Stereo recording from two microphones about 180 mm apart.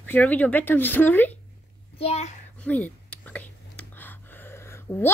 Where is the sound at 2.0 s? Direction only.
35° left (ahead or behind).